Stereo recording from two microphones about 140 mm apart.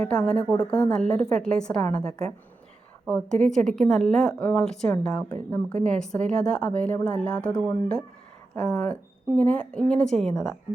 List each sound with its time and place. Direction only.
0.0 s a woman's voice: 5° left (ahead or behind)